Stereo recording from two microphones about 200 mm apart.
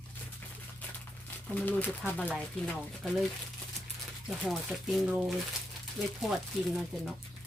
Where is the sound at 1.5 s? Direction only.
10° left (ahead or behind).